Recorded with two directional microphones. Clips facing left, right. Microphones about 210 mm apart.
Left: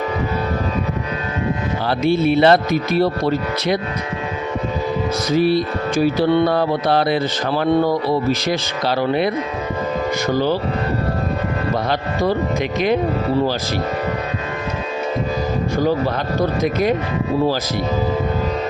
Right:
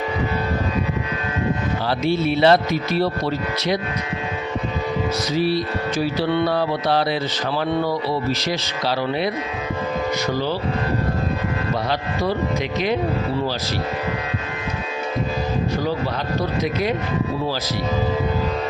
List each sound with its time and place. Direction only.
1.9 s speech: 55° left (ahead or behind)
5.3 s speech: 50° left (ahead or behind)